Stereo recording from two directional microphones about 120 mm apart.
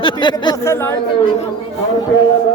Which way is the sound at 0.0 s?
40° left (ahead or behind).